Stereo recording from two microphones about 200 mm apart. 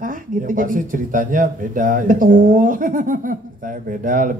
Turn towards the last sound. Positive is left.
turn(degrees=-45)  # may be behind; listen again after turning